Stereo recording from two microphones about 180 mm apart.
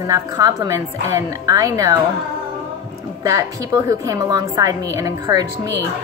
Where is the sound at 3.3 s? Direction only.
15° right (ahead or behind).